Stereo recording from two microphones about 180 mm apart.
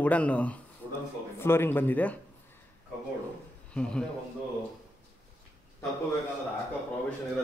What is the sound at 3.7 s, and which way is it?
Speech, 5° left (ahead or behind).